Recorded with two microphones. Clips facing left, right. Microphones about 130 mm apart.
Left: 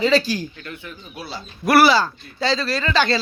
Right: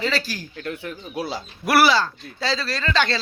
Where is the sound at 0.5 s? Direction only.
85° right.